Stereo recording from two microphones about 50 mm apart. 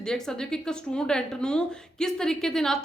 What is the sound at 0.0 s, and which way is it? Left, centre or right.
A woman's voice, centre.